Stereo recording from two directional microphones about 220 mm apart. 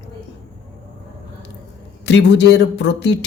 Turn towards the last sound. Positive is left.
turn(degrees=55)  # may be behind; listen again after turning